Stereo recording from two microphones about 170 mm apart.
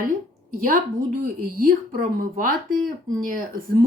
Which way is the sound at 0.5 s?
55° right (ahead or behind).